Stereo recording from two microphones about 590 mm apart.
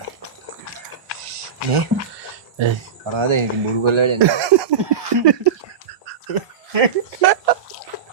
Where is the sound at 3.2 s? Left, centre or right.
Right.